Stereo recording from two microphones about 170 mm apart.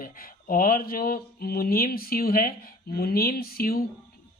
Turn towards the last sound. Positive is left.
turn(degrees=60)  # may be behind; listen again after turning